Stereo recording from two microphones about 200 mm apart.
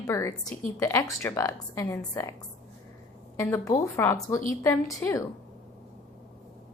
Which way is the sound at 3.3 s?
15° left (ahead or behind).